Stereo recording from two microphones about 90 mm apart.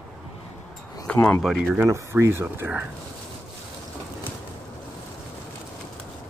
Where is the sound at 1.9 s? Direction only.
30° right (ahead or behind).